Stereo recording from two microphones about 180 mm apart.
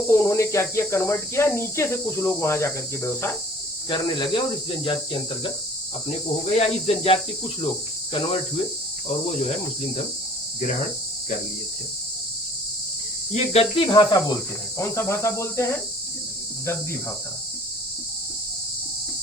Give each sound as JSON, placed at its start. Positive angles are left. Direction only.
{"t": 0.1, "sound": "speech", "side_deg": 15}
{"t": 3.8, "sound": "speech", "side_deg": 25}
{"t": 6.6, "sound": "speech", "side_deg": 35}
{"t": 13.3, "sound": "speech", "side_deg": 35}
{"t": 13.8, "sound": "speech", "side_deg": 20}